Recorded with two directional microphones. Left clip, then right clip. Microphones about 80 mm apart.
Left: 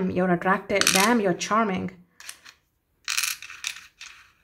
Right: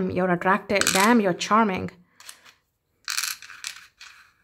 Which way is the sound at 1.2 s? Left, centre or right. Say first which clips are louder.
Right 2 dB; right.